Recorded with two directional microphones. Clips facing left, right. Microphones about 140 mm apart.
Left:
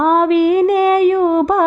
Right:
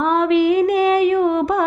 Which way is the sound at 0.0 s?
45° left (ahead or behind).